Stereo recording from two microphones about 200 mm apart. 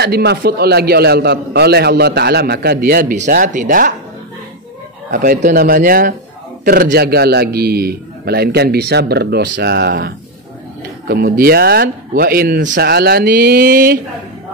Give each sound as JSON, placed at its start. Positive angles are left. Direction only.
{"t": 0.0, "sound": "a man's voice", "side_deg": -55}
{"t": 5.1, "sound": "a man's voice", "side_deg": -40}